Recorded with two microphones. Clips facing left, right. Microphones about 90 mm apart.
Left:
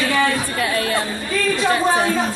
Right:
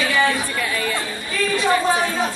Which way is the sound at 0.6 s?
60° left (ahead or behind).